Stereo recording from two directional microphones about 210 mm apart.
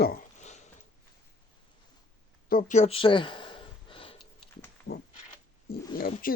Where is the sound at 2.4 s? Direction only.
40° left (ahead or behind).